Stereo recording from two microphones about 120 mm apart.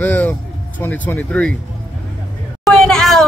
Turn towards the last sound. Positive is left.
turn(degrees=5)  # may be behind; listen again after turning